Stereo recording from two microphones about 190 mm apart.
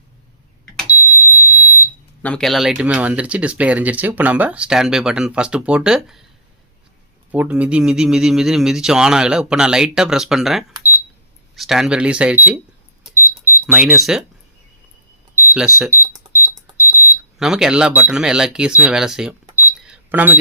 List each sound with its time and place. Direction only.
2.2 s speech: 5° left (ahead or behind)
7.3 s speech: 10° right (ahead or behind)
10.8 s cash register: 15° right (ahead or behind)
11.5 s speech: centre (ahead or behind)
13.1 s a sound: 10° right (ahead or behind)
15.4 s cash register: 10° right (ahead or behind)
17.3 s speech: centre (ahead or behind)
19.6 s a sound: 10° right (ahead or behind)